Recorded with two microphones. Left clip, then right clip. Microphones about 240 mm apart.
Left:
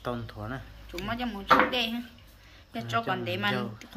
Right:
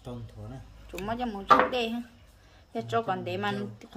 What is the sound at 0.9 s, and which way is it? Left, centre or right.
A woman's voice, right.